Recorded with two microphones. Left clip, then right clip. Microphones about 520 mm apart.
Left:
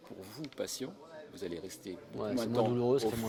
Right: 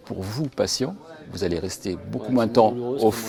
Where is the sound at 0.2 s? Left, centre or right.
Right.